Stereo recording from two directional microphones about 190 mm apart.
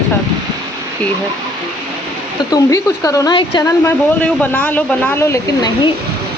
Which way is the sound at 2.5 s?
15° left (ahead or behind).